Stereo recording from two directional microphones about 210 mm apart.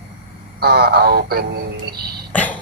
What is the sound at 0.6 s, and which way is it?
Speech, 50° right (ahead or behind).